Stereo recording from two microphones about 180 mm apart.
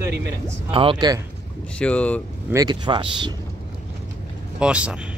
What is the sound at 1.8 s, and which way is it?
Speech, 5° left (ahead or behind).